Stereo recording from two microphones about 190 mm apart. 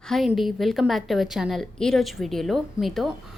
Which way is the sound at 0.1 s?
Centre (ahead or behind).